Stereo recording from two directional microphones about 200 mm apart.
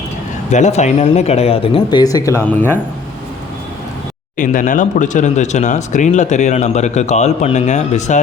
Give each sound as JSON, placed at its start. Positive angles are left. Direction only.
{"t": 0.5, "sound": "speech", "side_deg": 35}
{"t": 4.4, "sound": "speech", "side_deg": 40}